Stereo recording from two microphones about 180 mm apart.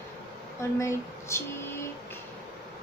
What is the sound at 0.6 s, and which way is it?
Speech, 15° left (ahead or behind).